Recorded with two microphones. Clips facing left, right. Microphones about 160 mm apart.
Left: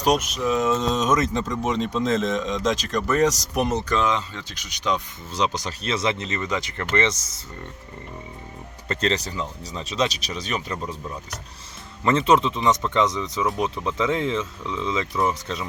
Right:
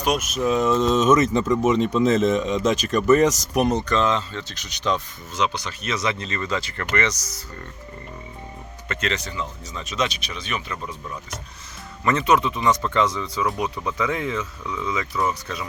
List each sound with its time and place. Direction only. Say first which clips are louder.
0.2 s a man's voice: right 2 dB; 5° right (ahead or behind); by 4.9 s 10° left (ahead or behind)
5.5 s speech: left 1 dB; 35° left (ahead or behind)
8.9 s speech: left 3 dB; 35° left (ahead or behind)